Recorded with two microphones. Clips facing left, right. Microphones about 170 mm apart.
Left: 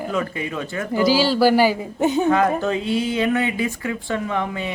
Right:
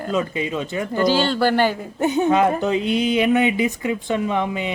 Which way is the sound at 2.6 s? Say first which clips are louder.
Right 2 dB; 20° right (ahead or behind).